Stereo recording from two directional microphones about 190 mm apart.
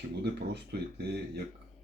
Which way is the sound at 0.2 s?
60° right (ahead or behind).